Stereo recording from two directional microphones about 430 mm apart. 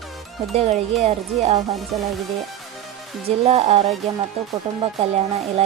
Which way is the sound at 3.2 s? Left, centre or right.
Centre.